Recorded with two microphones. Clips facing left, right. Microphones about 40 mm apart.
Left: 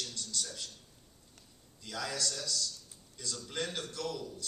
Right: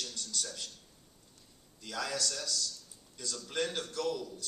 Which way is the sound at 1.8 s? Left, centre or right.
Right.